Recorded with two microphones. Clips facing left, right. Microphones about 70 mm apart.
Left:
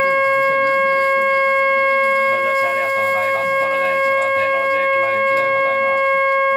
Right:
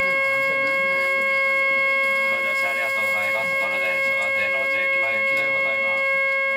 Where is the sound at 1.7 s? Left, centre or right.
Left.